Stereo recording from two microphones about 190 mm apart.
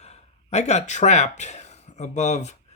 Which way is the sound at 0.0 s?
35° left (ahead or behind).